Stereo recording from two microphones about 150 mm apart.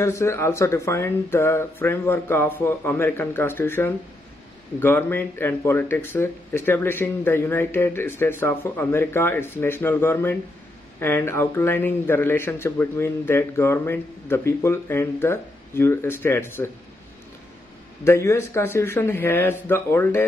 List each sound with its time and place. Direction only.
0.0 s a man's voice: 20° left (ahead or behind)
18.0 s a man's voice: 20° left (ahead or behind)